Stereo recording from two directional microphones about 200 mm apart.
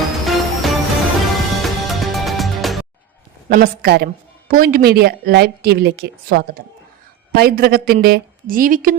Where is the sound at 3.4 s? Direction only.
50° right (ahead or behind).